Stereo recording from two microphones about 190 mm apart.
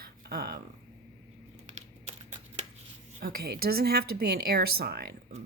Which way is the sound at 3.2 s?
55° right (ahead or behind).